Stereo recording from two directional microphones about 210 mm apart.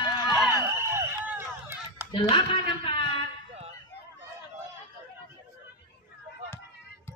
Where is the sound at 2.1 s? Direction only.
25° left (ahead or behind).